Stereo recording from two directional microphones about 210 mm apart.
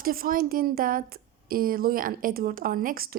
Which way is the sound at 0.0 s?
45° right (ahead or behind).